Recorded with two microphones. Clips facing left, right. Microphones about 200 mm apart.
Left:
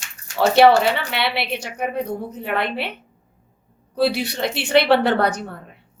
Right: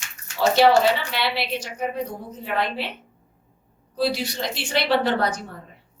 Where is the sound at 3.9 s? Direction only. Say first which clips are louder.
Left 4 dB; 60° left (ahead or behind).